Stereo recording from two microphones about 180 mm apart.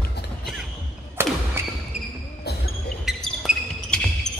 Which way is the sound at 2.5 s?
65° left (ahead or behind).